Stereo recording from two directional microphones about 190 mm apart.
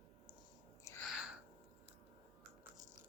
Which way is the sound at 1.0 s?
5° right (ahead or behind).